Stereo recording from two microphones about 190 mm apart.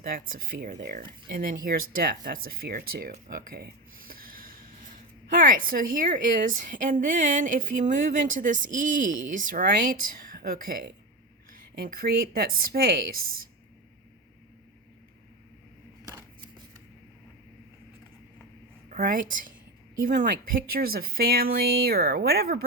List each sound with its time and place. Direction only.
0.1 s speech: 50° right (ahead or behind)
18.9 s speech: 45° right (ahead or behind)